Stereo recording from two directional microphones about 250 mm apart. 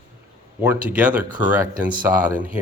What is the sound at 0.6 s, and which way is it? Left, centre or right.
Speech, centre.